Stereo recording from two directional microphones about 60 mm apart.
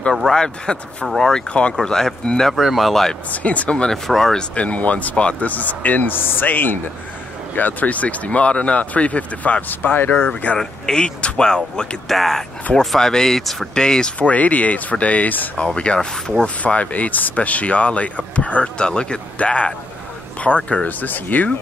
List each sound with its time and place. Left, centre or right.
0.1 s speech: centre
0.7 s speech: centre
1.5 s speech: centre
1.8 s speech: centre
2.5 s speech: centre
3.3 s speech: left
4.6 s speech: left
10.6 s speech: centre; by 15.5 s left
15.5 s speech: centre